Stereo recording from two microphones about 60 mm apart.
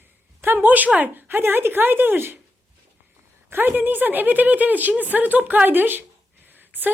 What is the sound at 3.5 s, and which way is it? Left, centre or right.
Speech, right.